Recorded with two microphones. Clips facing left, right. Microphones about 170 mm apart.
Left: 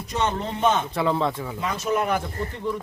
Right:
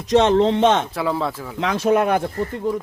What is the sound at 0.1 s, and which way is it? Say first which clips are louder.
Speech: right 12 dB; 90° right.